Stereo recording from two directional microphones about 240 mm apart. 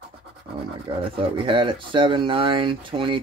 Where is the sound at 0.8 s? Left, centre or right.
Right.